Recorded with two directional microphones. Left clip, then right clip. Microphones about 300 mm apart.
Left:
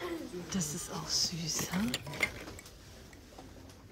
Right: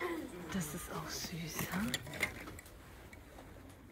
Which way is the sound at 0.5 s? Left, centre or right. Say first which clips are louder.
Left 4 dB; centre.